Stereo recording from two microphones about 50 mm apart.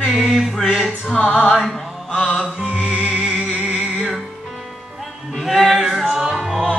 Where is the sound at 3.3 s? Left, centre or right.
Centre.